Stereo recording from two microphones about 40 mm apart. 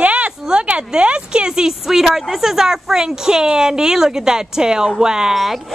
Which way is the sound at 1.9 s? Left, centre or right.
Centre.